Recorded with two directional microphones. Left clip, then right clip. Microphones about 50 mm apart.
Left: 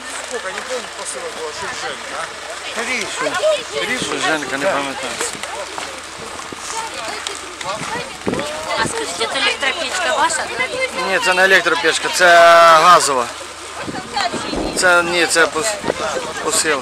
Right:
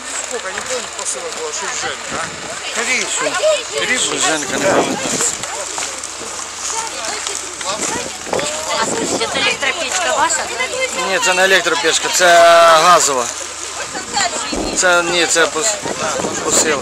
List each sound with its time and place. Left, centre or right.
2.8 s speech: right
3.2 s speech: centre
9.8 s speech: left
10.6 s speech: centre
14.1 s speech: right
14.8 s speech: centre